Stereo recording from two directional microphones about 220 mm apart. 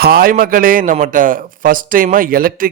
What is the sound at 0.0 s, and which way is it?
A man's voice, 45° right (ahead or behind).